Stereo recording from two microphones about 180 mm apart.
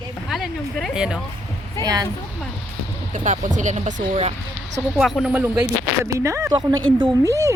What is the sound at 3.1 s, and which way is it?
Speech, 45° right (ahead or behind).